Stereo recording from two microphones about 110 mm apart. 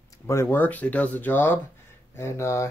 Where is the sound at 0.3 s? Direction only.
25° left (ahead or behind).